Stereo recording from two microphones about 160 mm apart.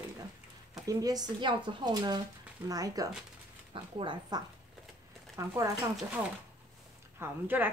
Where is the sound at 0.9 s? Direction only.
25° right (ahead or behind).